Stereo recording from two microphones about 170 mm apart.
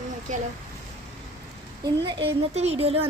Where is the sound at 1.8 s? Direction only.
30° right (ahead or behind).